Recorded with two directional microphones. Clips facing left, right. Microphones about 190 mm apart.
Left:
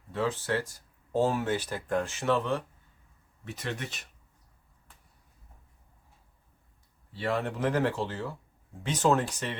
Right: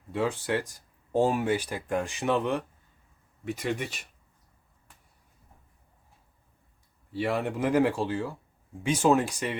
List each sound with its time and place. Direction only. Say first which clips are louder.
0.1 s speech: right 2 dB; 15° right (ahead or behind)
7.1 s speech: right 2 dB; 10° right (ahead or behind)